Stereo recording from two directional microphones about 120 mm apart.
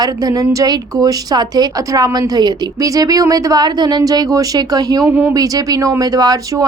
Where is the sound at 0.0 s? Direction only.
30° right (ahead or behind).